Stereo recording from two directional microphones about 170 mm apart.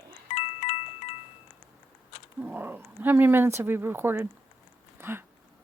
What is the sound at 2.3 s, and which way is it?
Speech, 10° right (ahead or behind).